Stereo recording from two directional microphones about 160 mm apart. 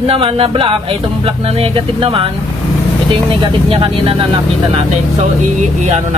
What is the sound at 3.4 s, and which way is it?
Speech, 30° right (ahead or behind).